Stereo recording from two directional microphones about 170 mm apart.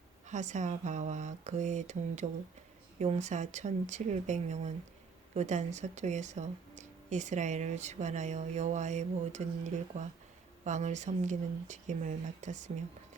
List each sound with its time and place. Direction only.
0.3 s speech: 45° right (ahead or behind)